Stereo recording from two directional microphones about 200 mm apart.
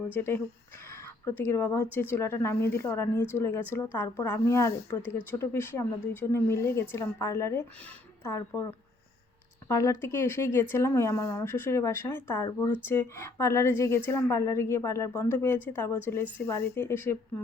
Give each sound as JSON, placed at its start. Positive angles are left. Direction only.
{"t": 0.2, "sound": "speech", "side_deg": 10}
{"t": 9.6, "sound": "speech", "side_deg": 15}
{"t": 12.5, "sound": "speech", "side_deg": 20}